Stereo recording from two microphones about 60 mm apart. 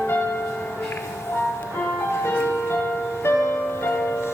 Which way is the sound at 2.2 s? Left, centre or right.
Left.